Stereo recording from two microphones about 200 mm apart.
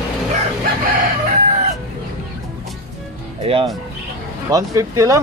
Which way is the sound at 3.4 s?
30° right (ahead or behind).